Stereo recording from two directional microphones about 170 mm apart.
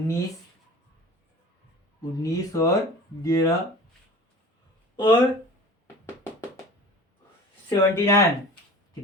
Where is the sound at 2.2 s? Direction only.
20° left (ahead or behind).